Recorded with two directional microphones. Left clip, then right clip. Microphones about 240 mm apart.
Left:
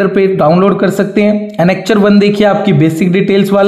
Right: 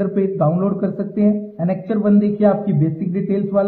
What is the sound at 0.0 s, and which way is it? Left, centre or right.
Speech, left.